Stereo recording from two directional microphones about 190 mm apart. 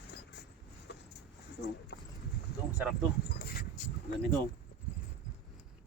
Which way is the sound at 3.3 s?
55° left (ahead or behind).